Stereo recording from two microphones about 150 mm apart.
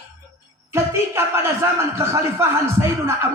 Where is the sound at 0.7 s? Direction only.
15° right (ahead or behind).